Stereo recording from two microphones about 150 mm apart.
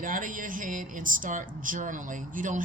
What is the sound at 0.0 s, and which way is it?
Speech, 65° right (ahead or behind).